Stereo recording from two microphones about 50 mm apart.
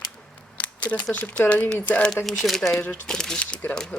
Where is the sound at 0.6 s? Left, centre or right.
Left.